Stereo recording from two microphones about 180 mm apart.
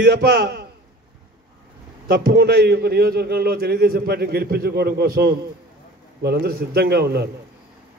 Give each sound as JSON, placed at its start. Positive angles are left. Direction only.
{"t": 0.1, "sound": "a man's voice", "side_deg": -55}
{"t": 2.0, "sound": "a man's voice", "side_deg": -60}